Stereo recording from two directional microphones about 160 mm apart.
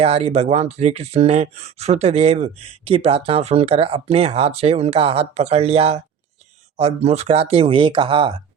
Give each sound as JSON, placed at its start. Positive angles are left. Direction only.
{"t": 0.0, "sound": "speech", "side_deg": -40}